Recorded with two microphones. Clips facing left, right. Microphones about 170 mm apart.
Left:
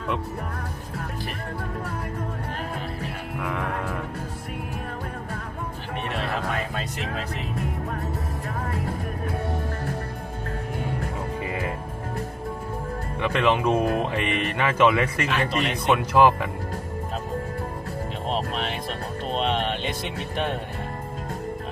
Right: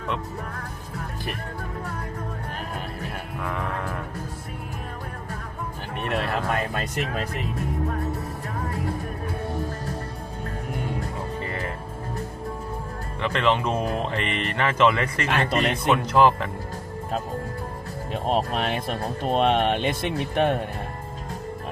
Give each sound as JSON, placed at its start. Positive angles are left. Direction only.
{"t": 11.3, "sound": "music", "side_deg": 10}
{"t": 13.2, "sound": "speech", "side_deg": 10}
{"t": 15.3, "sound": "speech", "side_deg": -50}
{"t": 15.9, "sound": "speech", "side_deg": 10}
{"t": 18.3, "sound": "speech", "side_deg": -50}